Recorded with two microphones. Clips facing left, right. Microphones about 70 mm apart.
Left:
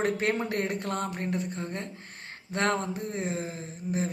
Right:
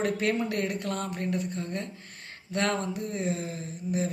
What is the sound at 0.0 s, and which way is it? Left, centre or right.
Speech, left.